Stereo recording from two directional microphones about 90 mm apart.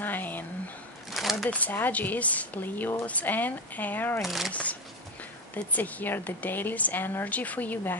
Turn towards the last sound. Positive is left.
turn(degrees=20)  # may be behind; listen again after turning